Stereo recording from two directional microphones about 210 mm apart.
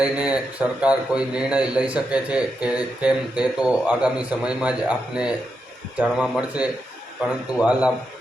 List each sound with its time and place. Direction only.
0.0 s a man's voice: 5° right (ahead or behind)